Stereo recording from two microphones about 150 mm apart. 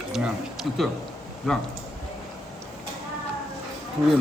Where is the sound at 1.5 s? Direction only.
Centre (ahead or behind).